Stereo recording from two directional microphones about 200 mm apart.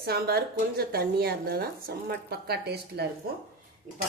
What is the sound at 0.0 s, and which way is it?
A woman's voice, 50° right (ahead or behind).